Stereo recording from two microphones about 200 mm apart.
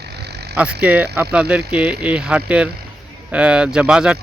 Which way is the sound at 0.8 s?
5° right (ahead or behind).